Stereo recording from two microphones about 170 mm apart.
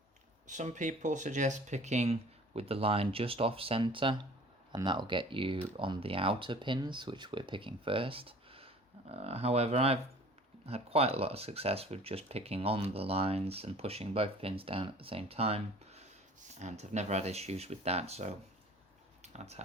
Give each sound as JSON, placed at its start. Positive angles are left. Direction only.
{"t": 0.4, "sound": "speech", "side_deg": -45}